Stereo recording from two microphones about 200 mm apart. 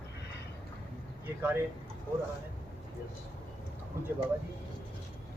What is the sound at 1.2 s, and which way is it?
Speech, 10° right (ahead or behind).